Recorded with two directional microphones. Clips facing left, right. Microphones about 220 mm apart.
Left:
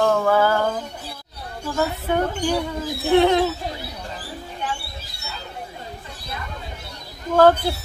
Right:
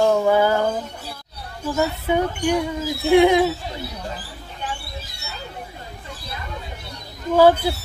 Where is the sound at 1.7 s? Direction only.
10° right (ahead or behind).